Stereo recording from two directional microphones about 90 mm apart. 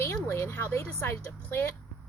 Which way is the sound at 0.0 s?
30° left (ahead or behind).